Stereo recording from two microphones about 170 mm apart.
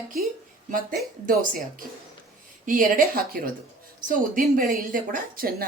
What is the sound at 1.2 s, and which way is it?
Speech, 50° right (ahead or behind).